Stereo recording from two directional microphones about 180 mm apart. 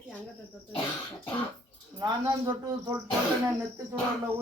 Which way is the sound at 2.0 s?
20° right (ahead or behind).